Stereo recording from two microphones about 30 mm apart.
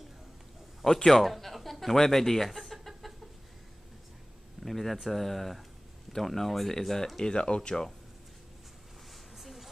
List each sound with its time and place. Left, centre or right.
0.8 s speech: centre
1.3 s speech: centre
2.5 s chicken: centre
4.6 s speech: centre
7.2 s speech: left
9.4 s a sound: centre